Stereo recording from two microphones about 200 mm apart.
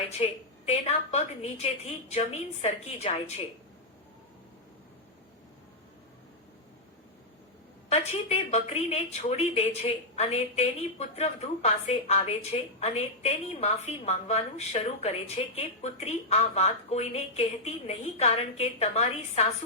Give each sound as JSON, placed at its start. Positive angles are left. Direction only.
{"t": 0.2, "sound": "a woman's voice", "side_deg": 30}
{"t": 7.9, "sound": "a woman's voice", "side_deg": 30}